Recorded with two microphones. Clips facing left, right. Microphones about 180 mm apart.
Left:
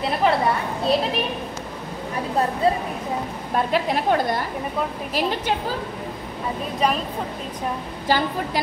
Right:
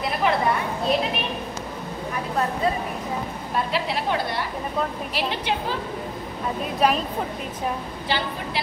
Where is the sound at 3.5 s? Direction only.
50° left (ahead or behind).